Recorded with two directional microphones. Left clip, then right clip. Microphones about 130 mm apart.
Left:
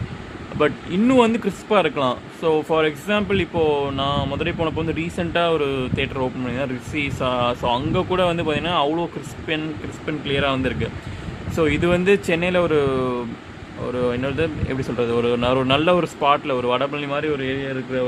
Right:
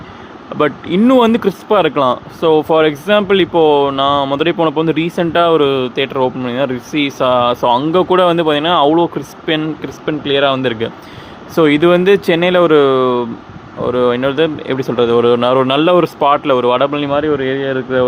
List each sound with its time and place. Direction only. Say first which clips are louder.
0.6 s speech: right 7 dB; 35° right (ahead or behind); by 18.0 s 50° right (ahead or behind)